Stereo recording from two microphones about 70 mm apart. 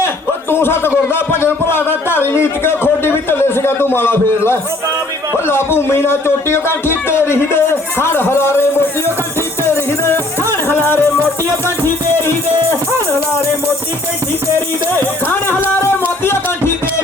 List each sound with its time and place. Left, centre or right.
0.5 s a man's voice: left
9.6 s music: left
14.9 s music: left